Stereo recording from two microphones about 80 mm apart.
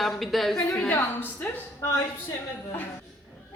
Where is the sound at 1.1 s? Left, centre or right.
Left.